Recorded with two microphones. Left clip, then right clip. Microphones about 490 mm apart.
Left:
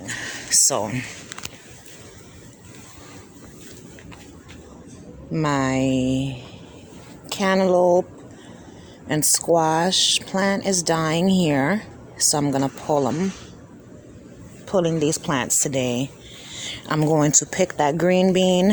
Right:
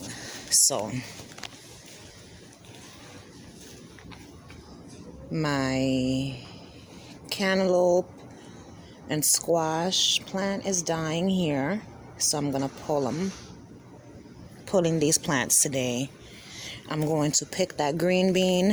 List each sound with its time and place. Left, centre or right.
0.1 s a sound: right
5.3 s a woman's voice: right
9.0 s speech: right
14.7 s speech: right